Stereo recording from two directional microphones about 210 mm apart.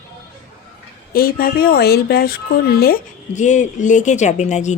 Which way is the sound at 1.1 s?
45° left (ahead or behind).